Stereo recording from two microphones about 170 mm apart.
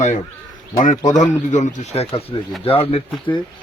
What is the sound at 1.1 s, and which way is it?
Speech, 45° left (ahead or behind).